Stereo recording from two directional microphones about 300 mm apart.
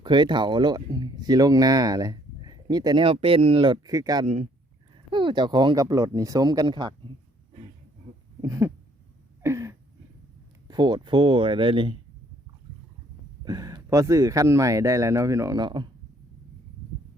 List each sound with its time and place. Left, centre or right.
0.0 s speech: centre
8.4 s speech: centre
9.4 s a sound: centre
10.7 s speech: centre
13.4 s speech: centre